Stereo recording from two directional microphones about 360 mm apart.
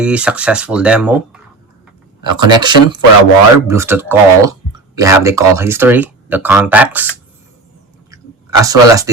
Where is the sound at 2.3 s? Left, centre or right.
Centre.